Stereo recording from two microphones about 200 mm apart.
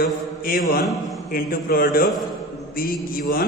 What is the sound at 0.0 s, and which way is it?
A man's voice, 45° left (ahead or behind).